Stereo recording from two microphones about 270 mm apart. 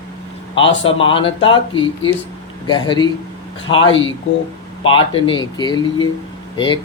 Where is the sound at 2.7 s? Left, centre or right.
Centre.